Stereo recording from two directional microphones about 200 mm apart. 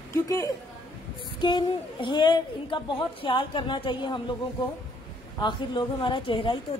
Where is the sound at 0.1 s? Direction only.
15° left (ahead or behind).